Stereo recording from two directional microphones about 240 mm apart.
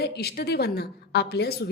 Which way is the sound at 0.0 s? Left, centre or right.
Left.